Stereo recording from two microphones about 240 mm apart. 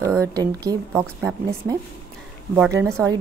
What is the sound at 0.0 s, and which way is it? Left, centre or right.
A woman's voice, centre.